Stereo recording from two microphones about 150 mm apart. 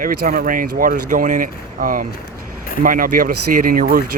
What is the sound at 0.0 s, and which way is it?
Speech, 80° right.